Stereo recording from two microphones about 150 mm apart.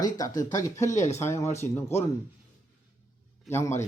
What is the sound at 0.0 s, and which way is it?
Speech, 25° left (ahead or behind).